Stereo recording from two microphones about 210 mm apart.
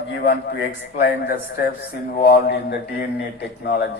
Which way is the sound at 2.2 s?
50° left (ahead or behind).